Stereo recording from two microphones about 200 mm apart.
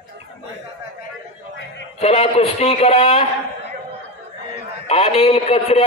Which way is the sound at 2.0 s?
30° left (ahead or behind).